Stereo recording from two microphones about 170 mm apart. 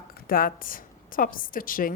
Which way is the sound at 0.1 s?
55° left (ahead or behind).